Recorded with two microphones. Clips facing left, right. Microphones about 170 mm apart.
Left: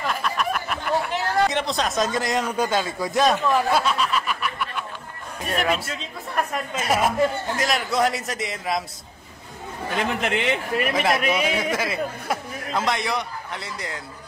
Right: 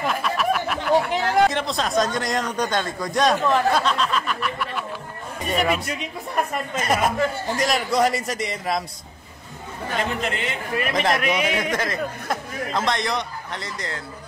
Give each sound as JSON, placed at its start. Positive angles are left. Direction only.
{"t": 0.0, "sound": "a sound", "side_deg": 0}
{"t": 1.5, "sound": "a man's voice", "side_deg": 0}
{"t": 5.9, "sound": "speech", "side_deg": -15}
{"t": 6.7, "sound": "a man's voice", "side_deg": 5}
{"t": 10.2, "sound": "a man's voice", "side_deg": 70}
{"t": 10.9, "sound": "a man's voice", "side_deg": 5}